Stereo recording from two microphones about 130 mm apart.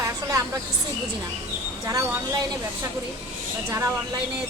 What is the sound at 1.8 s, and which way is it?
Speech, 25° right (ahead or behind).